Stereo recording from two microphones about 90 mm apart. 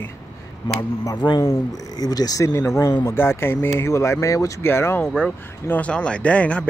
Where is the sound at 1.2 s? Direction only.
55° left (ahead or behind); by 5.0 s 25° left (ahead or behind).